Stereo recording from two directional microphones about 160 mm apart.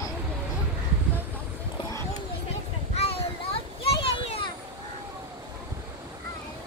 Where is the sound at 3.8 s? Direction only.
35° left (ahead or behind).